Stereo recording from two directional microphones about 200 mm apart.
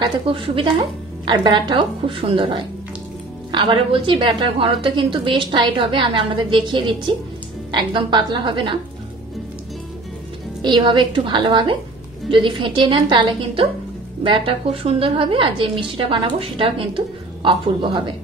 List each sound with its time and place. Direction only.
0.0 s a woman's voice: 25° right (ahead or behind)
10.6 s a woman's voice: 25° right (ahead or behind)